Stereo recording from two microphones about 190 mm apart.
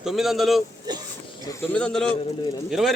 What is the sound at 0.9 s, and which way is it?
Speech, 20° right (ahead or behind).